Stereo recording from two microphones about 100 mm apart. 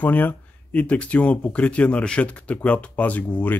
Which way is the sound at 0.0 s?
20° left (ahead or behind).